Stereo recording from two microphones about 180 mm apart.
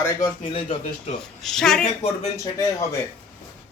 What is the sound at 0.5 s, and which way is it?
Speech, 30° left (ahead or behind).